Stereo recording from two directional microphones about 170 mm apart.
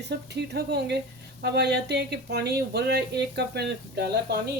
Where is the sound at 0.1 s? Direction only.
75° right (ahead or behind).